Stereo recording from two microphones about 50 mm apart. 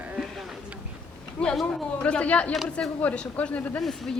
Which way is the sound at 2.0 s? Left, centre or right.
Left.